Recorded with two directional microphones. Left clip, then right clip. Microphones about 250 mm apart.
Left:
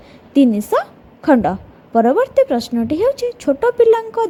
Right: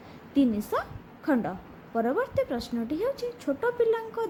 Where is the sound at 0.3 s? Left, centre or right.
Left.